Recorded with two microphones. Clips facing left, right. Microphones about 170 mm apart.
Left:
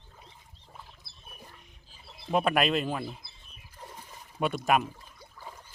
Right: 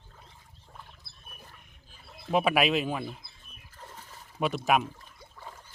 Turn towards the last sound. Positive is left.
turn(degrees=10)  # may be behind; listen again after turning